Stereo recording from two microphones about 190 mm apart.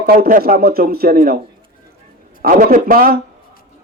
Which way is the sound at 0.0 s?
50° right (ahead or behind).